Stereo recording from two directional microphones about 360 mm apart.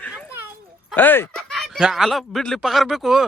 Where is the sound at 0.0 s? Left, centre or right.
Centre.